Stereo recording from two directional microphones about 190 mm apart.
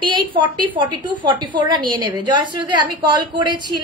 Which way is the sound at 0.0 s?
25° right (ahead or behind).